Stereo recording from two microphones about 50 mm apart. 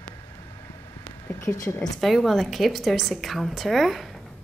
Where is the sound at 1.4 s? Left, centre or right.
Left.